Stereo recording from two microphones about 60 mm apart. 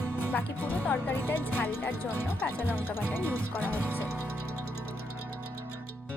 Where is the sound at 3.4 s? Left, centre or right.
Left.